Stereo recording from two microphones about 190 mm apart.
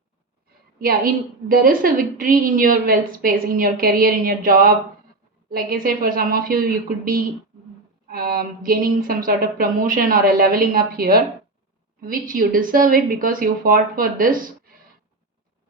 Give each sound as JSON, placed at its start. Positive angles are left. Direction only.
{"t": 0.8, "sound": "a woman's voice", "side_deg": -50}